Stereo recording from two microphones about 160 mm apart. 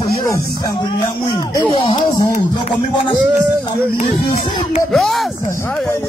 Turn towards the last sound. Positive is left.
turn(degrees=0)  # may be behind; listen again after turning